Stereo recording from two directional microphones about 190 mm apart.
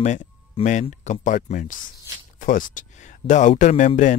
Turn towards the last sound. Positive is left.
turn(degrees=40)  # may be behind; listen again after turning